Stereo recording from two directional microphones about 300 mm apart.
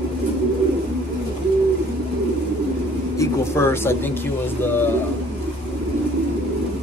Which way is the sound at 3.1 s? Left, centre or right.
Centre.